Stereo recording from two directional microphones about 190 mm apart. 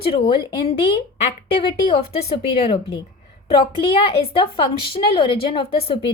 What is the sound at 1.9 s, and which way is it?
A woman's voice, 30° left (ahead or behind).